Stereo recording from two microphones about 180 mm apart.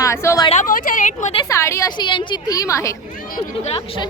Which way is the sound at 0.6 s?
50° left (ahead or behind).